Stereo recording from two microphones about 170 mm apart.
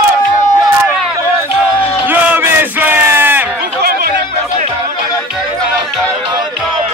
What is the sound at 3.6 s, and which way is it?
Music, 70° right (ahead or behind).